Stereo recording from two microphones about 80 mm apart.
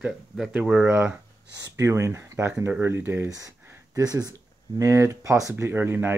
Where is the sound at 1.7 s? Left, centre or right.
Right.